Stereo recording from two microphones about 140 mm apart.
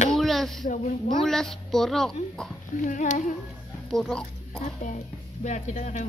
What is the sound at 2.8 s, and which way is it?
Speech, 65° left (ahead or behind).